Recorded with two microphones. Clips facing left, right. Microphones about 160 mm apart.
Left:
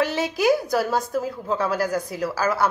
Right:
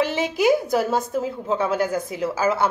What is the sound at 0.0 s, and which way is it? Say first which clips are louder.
A woman's voice: right 1 dB; 20° right (ahead or behind).